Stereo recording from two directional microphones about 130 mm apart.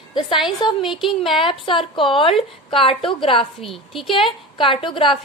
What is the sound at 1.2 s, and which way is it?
A woman's voice, 45° left (ahead or behind).